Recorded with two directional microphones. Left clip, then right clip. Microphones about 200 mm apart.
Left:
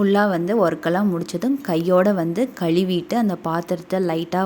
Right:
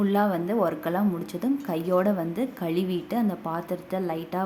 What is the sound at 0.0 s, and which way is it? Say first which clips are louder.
A woman's voice: left 6 dB; 25° left (ahead or behind).